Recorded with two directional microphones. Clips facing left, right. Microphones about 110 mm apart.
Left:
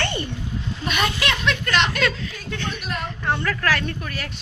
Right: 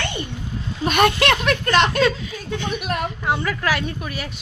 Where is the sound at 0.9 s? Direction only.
55° right (ahead or behind).